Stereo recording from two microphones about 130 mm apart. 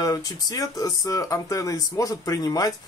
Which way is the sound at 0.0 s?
30° left (ahead or behind).